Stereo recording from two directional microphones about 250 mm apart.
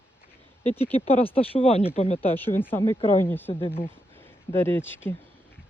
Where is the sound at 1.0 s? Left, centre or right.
Left.